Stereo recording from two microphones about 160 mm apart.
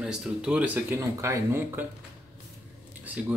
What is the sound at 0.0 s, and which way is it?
Speech, 5° right (ahead or behind).